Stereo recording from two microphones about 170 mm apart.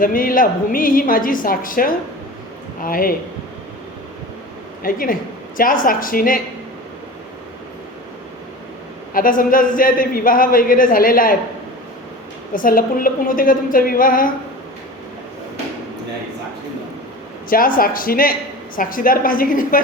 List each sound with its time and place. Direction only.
0.0 s a man's voice: 55° left (ahead or behind)
4.8 s a man's voice: 55° left (ahead or behind)
9.1 s a man's voice: 55° left (ahead or behind)
12.5 s a man's voice: 55° left (ahead or behind)
17.5 s a man's voice: 55° left (ahead or behind)